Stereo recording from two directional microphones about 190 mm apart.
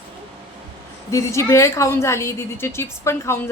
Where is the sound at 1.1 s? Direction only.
15° left (ahead or behind).